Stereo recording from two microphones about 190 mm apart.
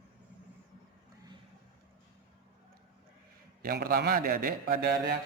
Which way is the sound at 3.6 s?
55° right (ahead or behind).